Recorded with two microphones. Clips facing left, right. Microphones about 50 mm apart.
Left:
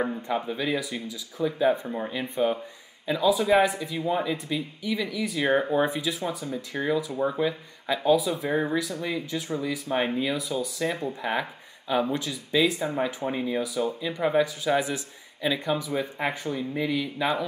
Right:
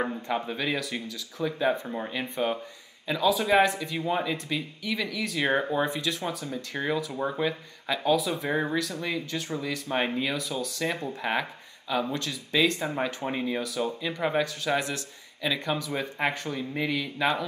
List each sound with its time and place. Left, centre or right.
0.0 s speech: centre
0.9 s speech: right
1.4 s speech: centre
3.1 s speech: centre
3.3 s speech: centre
5.7 s speech: centre
8.3 s speech: centre
10.3 s speech: centre
11.9 s speech: centre
16.3 s speech: centre